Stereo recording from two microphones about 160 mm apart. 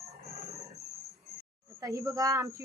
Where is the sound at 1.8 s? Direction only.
20° right (ahead or behind).